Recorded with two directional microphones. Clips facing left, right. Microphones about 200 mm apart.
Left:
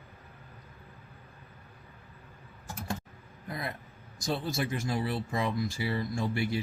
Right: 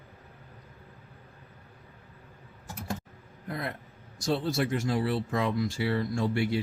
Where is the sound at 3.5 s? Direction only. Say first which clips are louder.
Right 2 dB; 65° right (ahead or behind).